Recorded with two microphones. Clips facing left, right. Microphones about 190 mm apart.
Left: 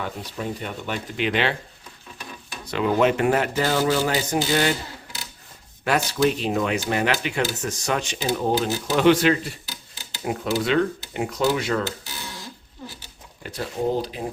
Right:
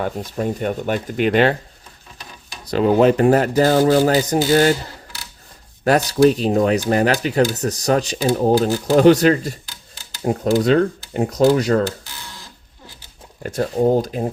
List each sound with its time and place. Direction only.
0.0 s speech: 45° right (ahead or behind)
2.6 s speech: 35° right (ahead or behind)
5.8 s speech: 40° right (ahead or behind)
13.4 s speech: 45° right (ahead or behind)